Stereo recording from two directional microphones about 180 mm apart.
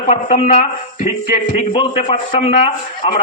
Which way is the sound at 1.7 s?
30° left (ahead or behind).